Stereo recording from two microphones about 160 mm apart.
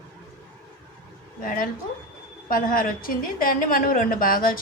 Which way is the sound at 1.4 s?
60° left (ahead or behind).